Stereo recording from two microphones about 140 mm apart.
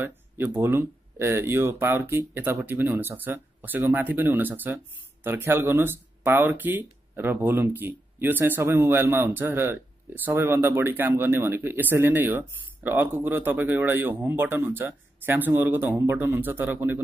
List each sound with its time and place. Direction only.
0.0 s speech: 15° right (ahead or behind)